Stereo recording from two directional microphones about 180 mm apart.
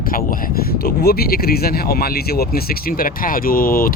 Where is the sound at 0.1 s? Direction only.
50° left (ahead or behind).